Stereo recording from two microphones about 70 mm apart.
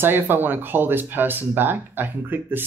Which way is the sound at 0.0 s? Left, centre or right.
Right.